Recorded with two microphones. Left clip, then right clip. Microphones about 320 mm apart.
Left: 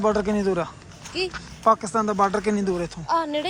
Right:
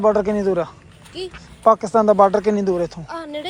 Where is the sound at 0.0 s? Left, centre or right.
Centre.